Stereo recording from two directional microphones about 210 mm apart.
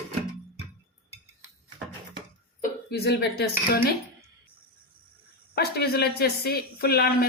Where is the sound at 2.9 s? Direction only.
50° left (ahead or behind).